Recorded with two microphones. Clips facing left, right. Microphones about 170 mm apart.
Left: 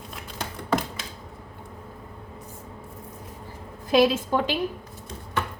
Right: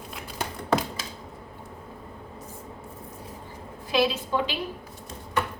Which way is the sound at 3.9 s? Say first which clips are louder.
Left 5 dB; 50° left (ahead or behind).